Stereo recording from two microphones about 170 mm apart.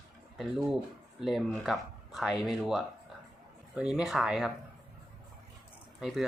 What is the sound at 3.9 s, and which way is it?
Speech, centre (ahead or behind).